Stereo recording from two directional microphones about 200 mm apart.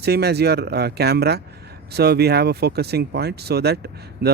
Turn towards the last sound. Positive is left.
turn(degrees=-55)  # may be behind; listen again after turning